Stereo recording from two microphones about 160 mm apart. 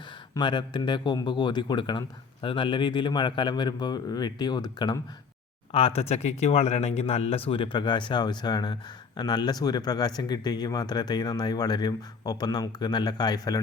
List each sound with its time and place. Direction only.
0.3 s speech: 30° left (ahead or behind)
5.7 s speech: 40° left (ahead or behind)